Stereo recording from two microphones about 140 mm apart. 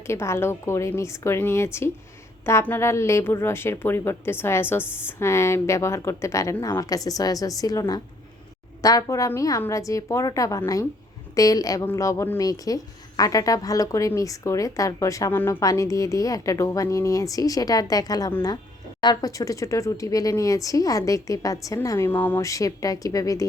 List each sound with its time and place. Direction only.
0.1 s speech: 20° left (ahead or behind)